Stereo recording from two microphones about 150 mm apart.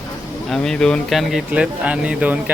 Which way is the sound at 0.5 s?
5° left (ahead or behind).